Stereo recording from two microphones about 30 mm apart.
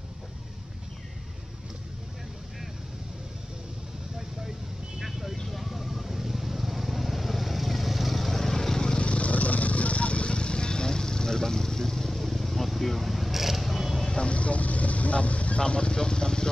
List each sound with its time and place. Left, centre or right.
5.0 s vehicle: centre
8.4 s vehicle: centre
9.0 s vehicle: left; by 14.0 s centre
14.1 s vehicle: left
15.6 s vehicle: left